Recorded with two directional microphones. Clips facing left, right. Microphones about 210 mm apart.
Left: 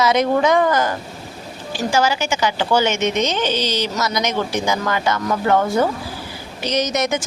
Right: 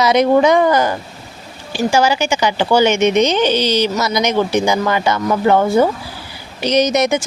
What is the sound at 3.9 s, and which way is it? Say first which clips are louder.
Speech: right 5 dB; 10° right (ahead or behind).